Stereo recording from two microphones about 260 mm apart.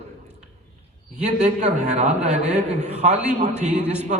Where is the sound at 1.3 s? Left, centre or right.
Right.